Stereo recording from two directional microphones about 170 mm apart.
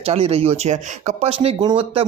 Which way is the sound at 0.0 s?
35° right (ahead or behind).